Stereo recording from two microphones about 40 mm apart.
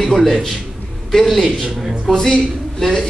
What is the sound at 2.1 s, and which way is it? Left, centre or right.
Speech, centre.